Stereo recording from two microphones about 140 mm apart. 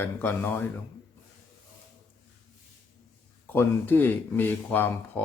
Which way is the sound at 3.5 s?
15° left (ahead or behind).